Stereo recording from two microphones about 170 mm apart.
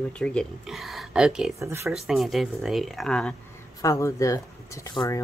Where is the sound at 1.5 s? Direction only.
15° right (ahead or behind).